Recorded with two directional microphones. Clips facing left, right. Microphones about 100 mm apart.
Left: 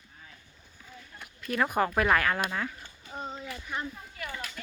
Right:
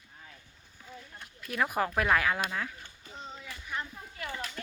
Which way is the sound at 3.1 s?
50° left (ahead or behind).